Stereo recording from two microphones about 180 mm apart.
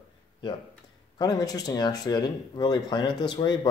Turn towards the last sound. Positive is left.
turn(degrees=25)  # may be behind; listen again after turning